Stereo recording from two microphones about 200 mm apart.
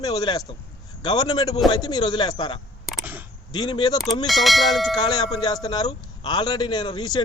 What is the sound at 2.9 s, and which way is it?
Single-lens reflex camera, 10° right (ahead or behind).